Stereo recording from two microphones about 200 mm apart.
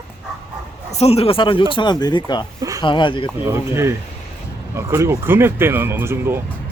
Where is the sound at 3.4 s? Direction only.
15° right (ahead or behind).